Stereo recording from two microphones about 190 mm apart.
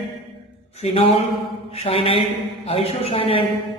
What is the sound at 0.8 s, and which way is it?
A man's voice, 35° left (ahead or behind).